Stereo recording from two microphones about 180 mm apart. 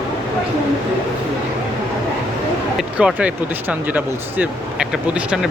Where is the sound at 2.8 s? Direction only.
5° right (ahead or behind).